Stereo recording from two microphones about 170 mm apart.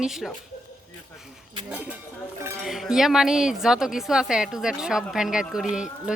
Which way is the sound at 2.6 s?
Centre (ahead or behind).